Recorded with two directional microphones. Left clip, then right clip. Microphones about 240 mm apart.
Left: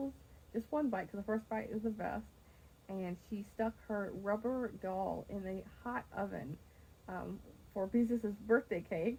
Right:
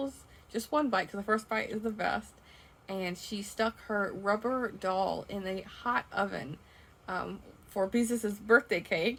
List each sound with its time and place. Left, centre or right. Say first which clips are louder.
0.5 s speech: right 8 dB; centre